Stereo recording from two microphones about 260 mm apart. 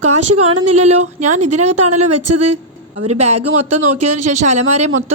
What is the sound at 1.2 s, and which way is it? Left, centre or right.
Speech, right.